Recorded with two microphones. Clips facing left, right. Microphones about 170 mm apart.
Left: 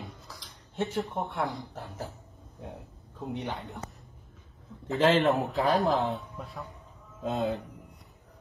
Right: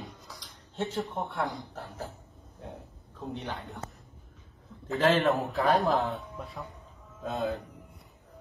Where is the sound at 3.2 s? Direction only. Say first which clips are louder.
Left 2 dB; 20° left (ahead or behind).